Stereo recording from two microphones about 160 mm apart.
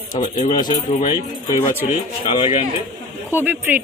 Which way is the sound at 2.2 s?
30° left (ahead or behind).